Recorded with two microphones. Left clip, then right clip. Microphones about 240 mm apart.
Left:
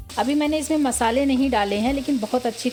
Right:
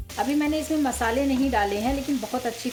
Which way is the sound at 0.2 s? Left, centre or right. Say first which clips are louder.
Left 3 dB; left.